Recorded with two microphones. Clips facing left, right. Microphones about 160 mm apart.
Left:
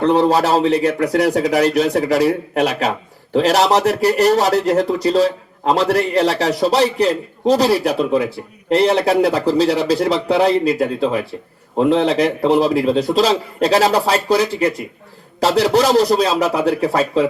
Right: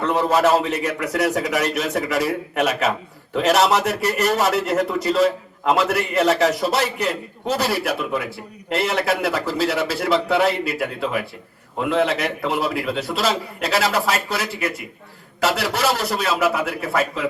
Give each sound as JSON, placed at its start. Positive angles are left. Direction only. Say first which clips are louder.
{"t": 0.0, "sound": "speech", "louder": "left 4 dB", "side_deg": 35}